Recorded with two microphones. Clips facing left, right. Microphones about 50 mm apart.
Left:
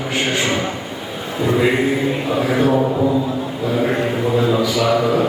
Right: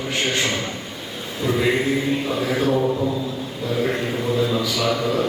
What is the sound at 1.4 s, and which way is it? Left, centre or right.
A man's voice, centre.